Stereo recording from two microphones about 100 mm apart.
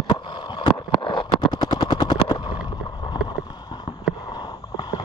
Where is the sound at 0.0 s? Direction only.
55° left (ahead or behind).